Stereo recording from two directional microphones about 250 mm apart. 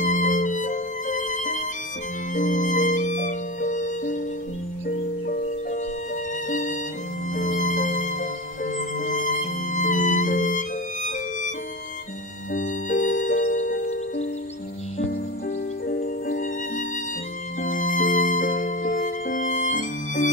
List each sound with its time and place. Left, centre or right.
0.0 s music: left
12.5 s music: left
15.9 s music: left